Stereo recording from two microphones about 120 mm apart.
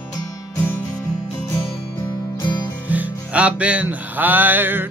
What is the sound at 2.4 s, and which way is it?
Music, 35° left (ahead or behind).